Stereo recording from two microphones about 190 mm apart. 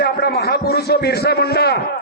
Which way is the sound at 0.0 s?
55° left (ahead or behind).